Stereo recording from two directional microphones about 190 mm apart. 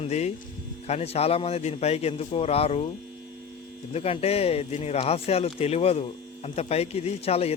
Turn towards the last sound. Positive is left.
turn(degrees=30)  # may be behind; listen again after turning